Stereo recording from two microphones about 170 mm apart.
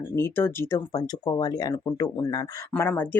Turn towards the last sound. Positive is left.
turn(degrees=10)  # may be behind; listen again after turning